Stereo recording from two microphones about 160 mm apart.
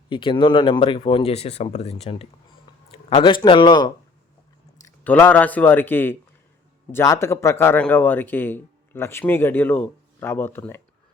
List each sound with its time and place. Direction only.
0.1 s a man's voice: 30° left (ahead or behind)
5.0 s a man's voice: 10° left (ahead or behind)